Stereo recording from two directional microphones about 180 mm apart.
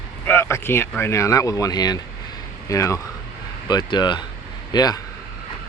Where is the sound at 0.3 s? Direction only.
15° left (ahead or behind).